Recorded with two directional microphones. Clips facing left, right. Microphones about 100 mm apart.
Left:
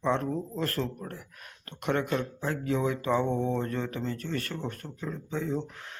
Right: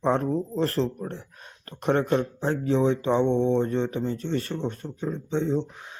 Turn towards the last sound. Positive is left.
turn(degrees=-20)  # may be behind; listen again after turning